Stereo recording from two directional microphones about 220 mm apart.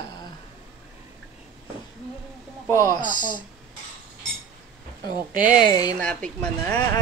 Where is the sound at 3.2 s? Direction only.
20° left (ahead or behind).